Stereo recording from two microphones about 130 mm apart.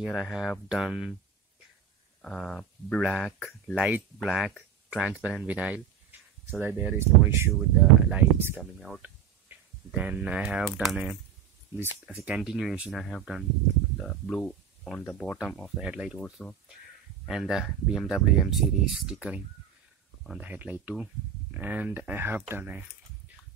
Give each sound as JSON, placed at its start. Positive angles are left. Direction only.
{"t": 0.0, "sound": "speech", "side_deg": 0}
{"t": 2.2, "sound": "speech", "side_deg": 5}
{"t": 8.7, "sound": "speech", "side_deg": -5}
{"t": 15.0, "sound": "speech", "side_deg": 15}
{"t": 15.4, "sound": "speech", "side_deg": 5}
{"t": 15.8, "sound": "speech", "side_deg": -5}
{"t": 16.4, "sound": "speech", "side_deg": 5}